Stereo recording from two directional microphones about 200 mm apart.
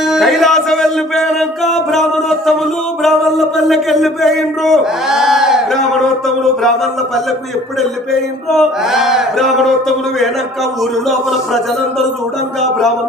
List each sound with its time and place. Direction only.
0.0 s a sound: centre (ahead or behind)
3.0 s a man's voice: centre (ahead or behind)
8.4 s male singing: centre (ahead or behind)
11.3 s male singing: centre (ahead or behind)